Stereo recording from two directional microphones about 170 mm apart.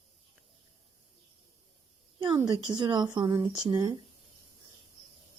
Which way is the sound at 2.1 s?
25° right (ahead or behind).